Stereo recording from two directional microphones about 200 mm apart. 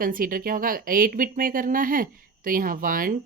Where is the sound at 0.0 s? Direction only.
45° right (ahead or behind).